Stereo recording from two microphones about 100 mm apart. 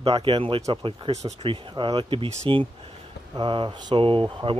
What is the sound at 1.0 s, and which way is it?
Speech, 75° right (ahead or behind).